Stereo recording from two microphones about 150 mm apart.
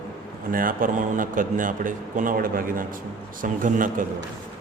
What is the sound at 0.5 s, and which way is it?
A man's voice, 65° right (ahead or behind).